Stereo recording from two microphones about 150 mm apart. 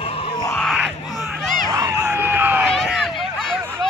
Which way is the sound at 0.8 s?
Centre (ahead or behind).